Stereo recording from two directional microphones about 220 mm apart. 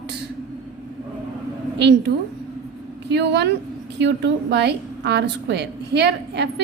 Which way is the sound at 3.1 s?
50° right (ahead or behind).